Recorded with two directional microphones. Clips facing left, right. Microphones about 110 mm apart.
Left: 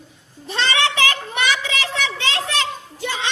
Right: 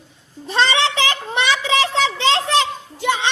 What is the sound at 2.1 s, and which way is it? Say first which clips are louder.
Children playing: right 6 dB; 25° right (ahead or behind).